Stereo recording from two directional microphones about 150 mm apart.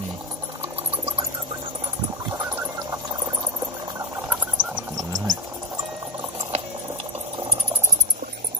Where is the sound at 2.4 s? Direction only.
10° right (ahead or behind).